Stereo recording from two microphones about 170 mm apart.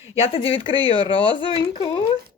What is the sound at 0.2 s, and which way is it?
Speech, 35° left (ahead or behind).